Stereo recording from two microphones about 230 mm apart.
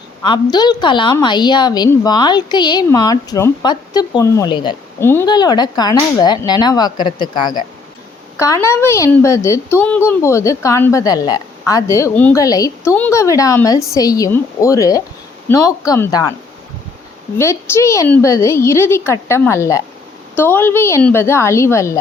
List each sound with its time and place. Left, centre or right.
0.2 s a woman's voice: centre
17.3 s a woman's voice: centre